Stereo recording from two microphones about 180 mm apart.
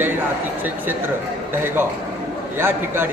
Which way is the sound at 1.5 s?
10° right (ahead or behind).